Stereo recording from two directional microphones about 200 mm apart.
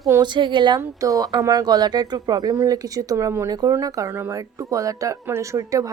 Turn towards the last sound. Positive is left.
turn(degrees=-15)  # may be behind; listen again after turning